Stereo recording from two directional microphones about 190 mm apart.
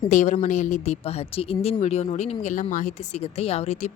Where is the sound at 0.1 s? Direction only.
40° left (ahead or behind).